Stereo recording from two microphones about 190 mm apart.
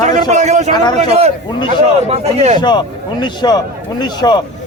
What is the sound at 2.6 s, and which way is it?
A man's voice, 25° left (ahead or behind).